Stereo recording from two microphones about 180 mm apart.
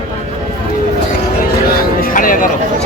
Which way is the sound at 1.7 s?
50° left (ahead or behind).